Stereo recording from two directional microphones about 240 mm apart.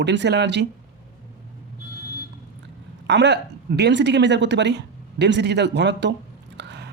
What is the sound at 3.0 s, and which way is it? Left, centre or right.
Speech, right.